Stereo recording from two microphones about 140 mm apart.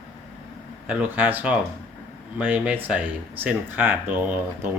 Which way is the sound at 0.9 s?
10° right (ahead or behind).